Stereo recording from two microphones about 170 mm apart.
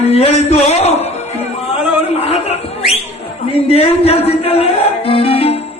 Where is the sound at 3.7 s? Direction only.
35° left (ahead or behind).